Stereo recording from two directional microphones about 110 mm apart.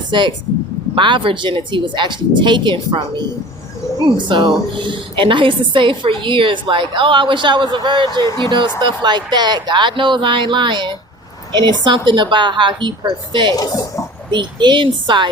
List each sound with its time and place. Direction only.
0.1 s a woman's voice: 45° right (ahead or behind)
13.6 s speech: 30° left (ahead or behind)
14.3 s a woman's voice: 45° right (ahead or behind)